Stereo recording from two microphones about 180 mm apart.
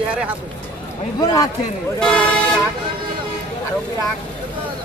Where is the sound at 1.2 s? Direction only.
20° left (ahead or behind).